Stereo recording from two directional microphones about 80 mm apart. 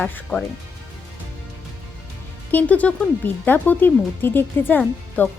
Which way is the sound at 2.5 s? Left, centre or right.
Centre.